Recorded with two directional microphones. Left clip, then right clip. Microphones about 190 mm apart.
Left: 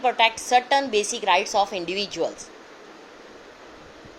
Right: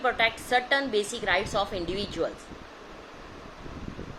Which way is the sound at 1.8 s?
55° left (ahead or behind).